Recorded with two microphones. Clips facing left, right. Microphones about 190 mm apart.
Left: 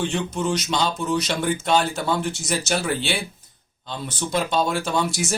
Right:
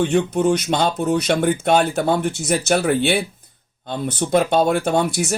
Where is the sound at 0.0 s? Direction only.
55° right (ahead or behind).